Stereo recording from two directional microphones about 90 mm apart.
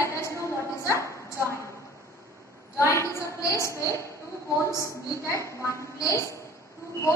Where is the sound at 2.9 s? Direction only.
30° left (ahead or behind).